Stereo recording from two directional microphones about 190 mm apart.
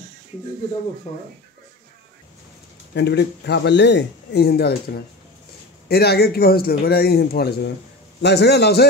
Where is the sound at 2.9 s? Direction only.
65° left (ahead or behind).